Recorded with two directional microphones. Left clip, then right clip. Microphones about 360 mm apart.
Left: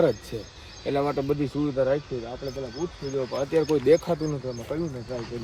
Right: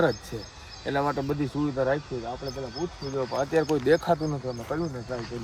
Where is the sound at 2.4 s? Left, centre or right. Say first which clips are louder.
Left 1 dB; centre.